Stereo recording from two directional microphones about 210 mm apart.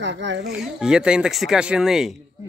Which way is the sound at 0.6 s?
5° right (ahead or behind).